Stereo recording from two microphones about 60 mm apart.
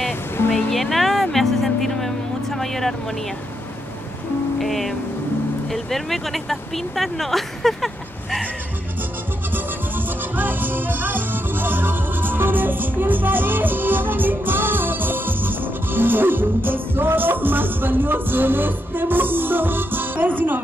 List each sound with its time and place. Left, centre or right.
0.7 s music: centre
4.6 s speech: centre
9.5 s music: right